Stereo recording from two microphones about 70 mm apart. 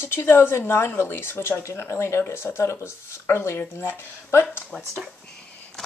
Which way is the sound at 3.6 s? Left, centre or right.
Left.